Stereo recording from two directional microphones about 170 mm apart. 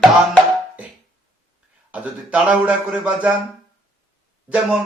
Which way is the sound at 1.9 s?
5° right (ahead or behind).